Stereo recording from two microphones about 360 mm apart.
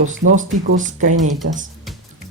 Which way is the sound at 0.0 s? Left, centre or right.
Right.